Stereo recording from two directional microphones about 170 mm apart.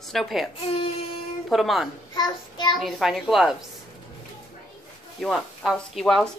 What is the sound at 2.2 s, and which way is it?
Child singing, 25° left (ahead or behind).